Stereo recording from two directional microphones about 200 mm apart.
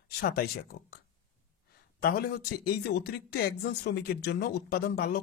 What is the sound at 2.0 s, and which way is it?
Speech, 50° left (ahead or behind).